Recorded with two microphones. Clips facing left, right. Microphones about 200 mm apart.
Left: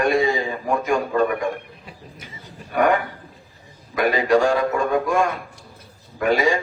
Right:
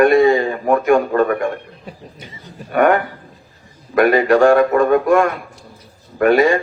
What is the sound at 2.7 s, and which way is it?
A man's voice, 60° right (ahead or behind).